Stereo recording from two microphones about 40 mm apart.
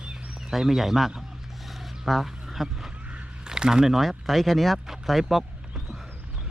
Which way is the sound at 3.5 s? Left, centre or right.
Centre.